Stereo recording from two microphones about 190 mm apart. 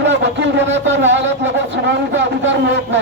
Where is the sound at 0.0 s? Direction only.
70° right (ahead or behind).